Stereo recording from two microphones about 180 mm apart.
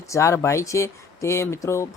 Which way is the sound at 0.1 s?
15° left (ahead or behind).